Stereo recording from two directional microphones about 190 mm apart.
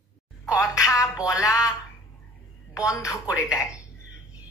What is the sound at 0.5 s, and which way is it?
Speech, 15° left (ahead or behind).